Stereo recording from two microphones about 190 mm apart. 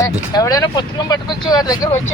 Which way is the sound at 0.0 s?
20° left (ahead or behind).